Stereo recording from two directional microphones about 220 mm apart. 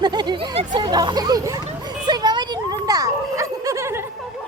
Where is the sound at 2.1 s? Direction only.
20° right (ahead or behind).